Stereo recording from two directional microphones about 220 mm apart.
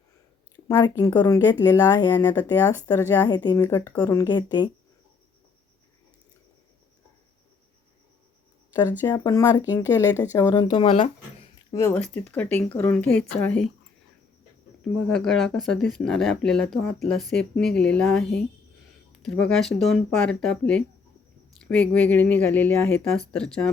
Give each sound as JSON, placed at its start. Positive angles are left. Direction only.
{"t": 0.5, "sound": "speech", "side_deg": 15}
{"t": 8.9, "sound": "speech", "side_deg": 15}
{"t": 11.7, "sound": "speech", "side_deg": 10}
{"t": 15.1, "sound": "speech", "side_deg": 0}